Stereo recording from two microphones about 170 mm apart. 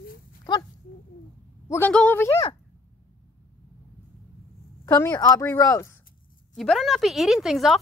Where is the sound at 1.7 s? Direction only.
10° left (ahead or behind).